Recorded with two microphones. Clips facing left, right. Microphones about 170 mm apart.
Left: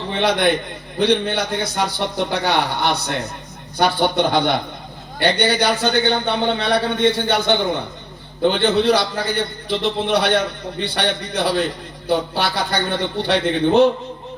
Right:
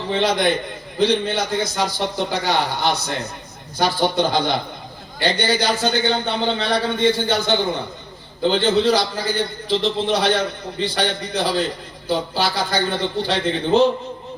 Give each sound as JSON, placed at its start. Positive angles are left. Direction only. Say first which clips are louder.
{"t": 0.1, "sound": "a man's voice", "louder": "left 1 dB", "side_deg": 60}